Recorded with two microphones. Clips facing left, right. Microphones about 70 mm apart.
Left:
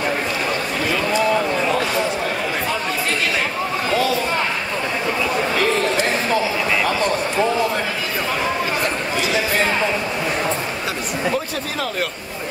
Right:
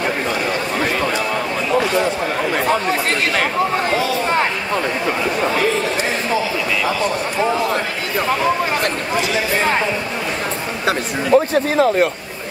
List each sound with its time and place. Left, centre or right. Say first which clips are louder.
11.3 s speech: right 10 dB; right